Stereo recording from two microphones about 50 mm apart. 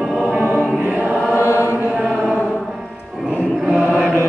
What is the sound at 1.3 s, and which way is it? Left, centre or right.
Chant, left.